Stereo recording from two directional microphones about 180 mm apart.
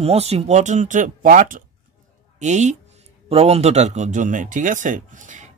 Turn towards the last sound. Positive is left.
turn(degrees=-45)  # may be behind; listen again after turning